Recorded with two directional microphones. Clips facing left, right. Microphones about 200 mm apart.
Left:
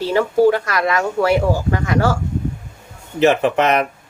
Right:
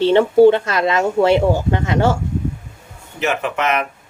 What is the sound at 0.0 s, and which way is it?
Speech, 25° right (ahead or behind).